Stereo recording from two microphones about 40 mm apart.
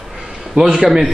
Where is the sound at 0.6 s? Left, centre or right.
Centre.